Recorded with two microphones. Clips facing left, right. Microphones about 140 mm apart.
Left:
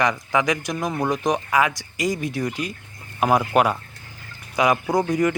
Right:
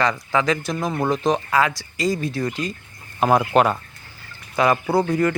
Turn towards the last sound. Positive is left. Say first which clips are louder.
# right 1 dB
turn(degrees=15)  # may be behind; listen again after turning